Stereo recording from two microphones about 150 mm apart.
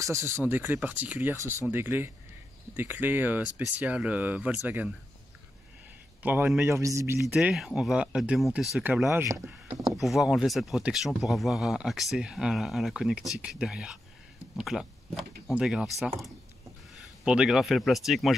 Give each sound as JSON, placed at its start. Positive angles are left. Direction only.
{"t": 0.0, "sound": "a man's voice", "side_deg": -20}
{"t": 6.2, "sound": "a man's voice", "side_deg": -15}
{"t": 7.3, "sound": "speech", "side_deg": -5}
{"t": 9.9, "sound": "a man's voice", "side_deg": 0}